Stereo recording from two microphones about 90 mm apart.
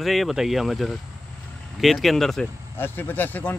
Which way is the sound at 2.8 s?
20° left (ahead or behind).